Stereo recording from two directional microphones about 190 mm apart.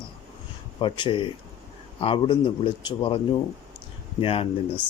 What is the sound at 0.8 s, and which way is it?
A man's voice, 25° left (ahead or behind).